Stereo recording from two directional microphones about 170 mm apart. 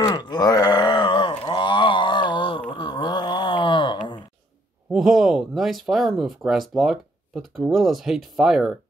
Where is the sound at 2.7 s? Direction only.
25° left (ahead or behind).